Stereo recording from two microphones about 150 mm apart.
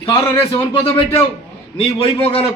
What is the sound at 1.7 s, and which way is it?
Speech, 35° left (ahead or behind).